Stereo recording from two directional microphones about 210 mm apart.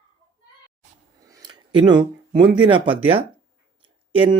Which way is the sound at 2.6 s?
25° right (ahead or behind).